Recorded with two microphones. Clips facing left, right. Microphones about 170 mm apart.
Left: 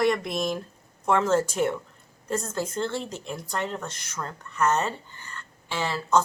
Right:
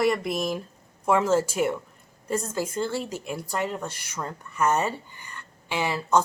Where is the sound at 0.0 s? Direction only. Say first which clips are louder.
Even; 5° right (ahead or behind).